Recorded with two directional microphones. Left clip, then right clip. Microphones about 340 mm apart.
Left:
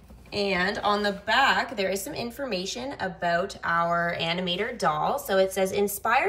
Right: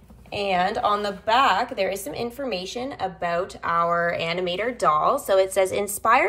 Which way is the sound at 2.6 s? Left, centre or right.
Centre.